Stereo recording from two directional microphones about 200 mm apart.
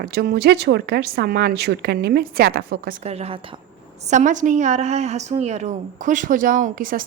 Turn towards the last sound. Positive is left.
turn(degrees=-45)  # may be behind; listen again after turning